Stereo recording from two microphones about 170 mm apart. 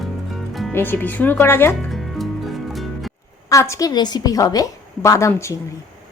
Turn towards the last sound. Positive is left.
turn(degrees=15)  # may be behind; listen again after turning